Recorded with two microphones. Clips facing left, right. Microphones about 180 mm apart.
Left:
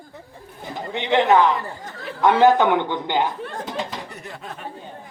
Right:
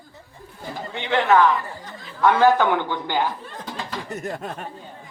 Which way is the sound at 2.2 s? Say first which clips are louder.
Left 2 dB; 20° left (ahead or behind).